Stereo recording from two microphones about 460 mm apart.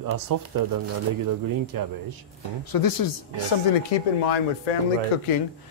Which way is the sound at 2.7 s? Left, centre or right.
Left.